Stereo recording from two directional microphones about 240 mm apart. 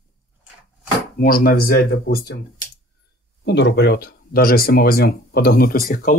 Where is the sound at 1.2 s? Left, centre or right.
Left.